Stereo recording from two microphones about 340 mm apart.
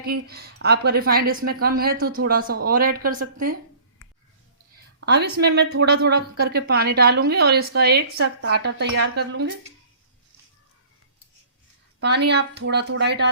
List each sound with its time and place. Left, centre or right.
0.0 s a woman's voice: right
4.9 s a woman's voice: right
11.9 s a woman's voice: right